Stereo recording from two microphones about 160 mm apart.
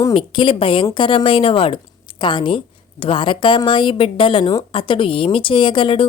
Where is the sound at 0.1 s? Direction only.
30° left (ahead or behind).